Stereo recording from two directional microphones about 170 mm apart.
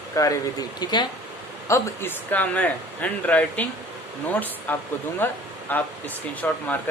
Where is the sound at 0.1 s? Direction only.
20° left (ahead or behind).